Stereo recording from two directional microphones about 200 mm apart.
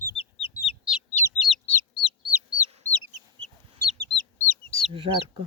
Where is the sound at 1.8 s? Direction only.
20° left (ahead or behind).